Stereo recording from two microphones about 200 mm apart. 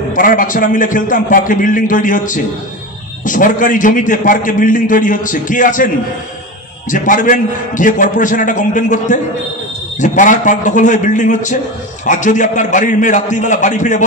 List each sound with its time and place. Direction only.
0.1 s a man's voice: 40° left (ahead or behind)
6.9 s a man's voice: 40° left (ahead or behind)